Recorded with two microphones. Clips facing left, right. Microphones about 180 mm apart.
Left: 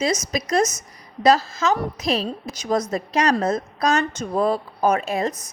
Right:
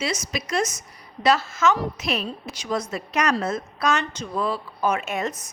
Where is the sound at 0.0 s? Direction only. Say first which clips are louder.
Left 5 dB; 40° left (ahead or behind).